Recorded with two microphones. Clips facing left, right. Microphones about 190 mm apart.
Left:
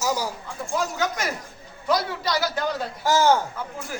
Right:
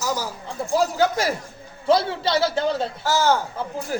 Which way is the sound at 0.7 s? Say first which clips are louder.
Right 6 dB; 30° right (ahead or behind).